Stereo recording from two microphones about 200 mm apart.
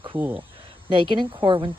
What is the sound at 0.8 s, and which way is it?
Speech, 25° right (ahead or behind).